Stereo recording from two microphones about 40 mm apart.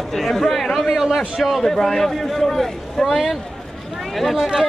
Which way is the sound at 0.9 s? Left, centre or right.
Centre.